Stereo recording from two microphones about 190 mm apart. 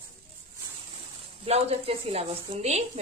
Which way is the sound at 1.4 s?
35° right (ahead or behind).